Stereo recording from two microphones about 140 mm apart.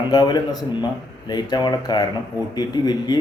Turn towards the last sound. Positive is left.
turn(degrees=30)  # may be behind; listen again after turning